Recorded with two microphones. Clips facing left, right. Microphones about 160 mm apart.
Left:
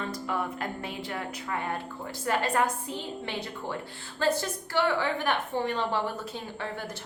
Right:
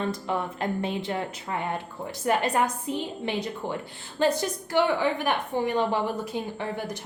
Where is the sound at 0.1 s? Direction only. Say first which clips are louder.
Right 2 dB; 25° right (ahead or behind).